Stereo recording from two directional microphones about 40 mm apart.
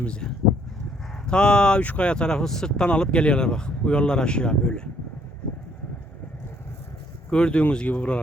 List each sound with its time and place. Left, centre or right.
0.0 s speech: left
1.3 s speech: left
7.3 s speech: left